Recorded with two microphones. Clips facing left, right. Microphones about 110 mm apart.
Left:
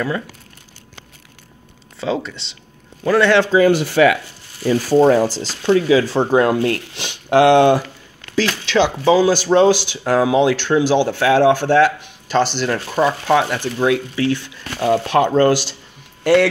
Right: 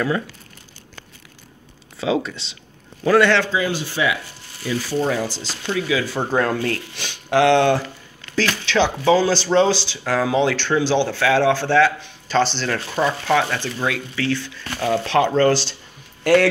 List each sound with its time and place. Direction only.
2.0 s a man's voice: 5° right (ahead or behind)
3.5 s speech: 60° left (ahead or behind)
4.6 s speech: 40° left (ahead or behind)
6.3 s speech: 15° left (ahead or behind)
8.6 s speech: centre (ahead or behind); by 10.3 s 20° left (ahead or behind)
10.3 s speech: 10° left (ahead or behind)
16.3 s speech: centre (ahead or behind)